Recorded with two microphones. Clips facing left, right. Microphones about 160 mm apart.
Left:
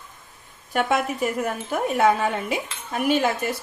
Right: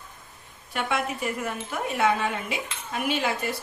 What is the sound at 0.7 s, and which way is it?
Speech, 45° left (ahead or behind).